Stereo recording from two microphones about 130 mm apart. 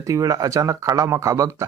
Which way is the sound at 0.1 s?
25° right (ahead or behind).